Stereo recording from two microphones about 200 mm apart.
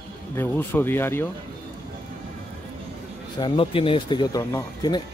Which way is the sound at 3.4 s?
25° left (ahead or behind).